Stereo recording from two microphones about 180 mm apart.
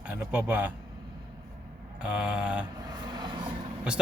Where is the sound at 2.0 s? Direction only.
5° right (ahead or behind).